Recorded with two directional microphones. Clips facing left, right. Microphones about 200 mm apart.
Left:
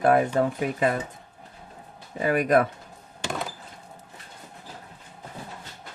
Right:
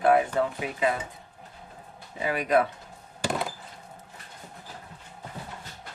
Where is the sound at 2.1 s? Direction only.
50° left (ahead or behind).